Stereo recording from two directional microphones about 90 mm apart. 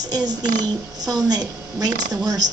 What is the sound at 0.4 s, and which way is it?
Speech, 50° right (ahead or behind).